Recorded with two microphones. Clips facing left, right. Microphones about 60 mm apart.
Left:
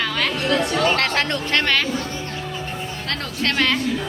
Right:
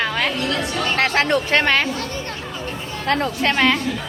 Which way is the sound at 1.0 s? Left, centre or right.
Centre.